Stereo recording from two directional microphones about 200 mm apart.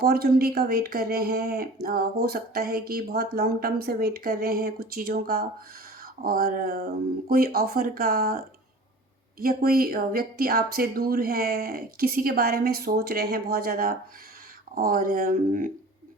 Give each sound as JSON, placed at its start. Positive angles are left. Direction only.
{"t": 0.0, "sound": "speech", "side_deg": -50}
{"t": 9.4, "sound": "speech", "side_deg": -50}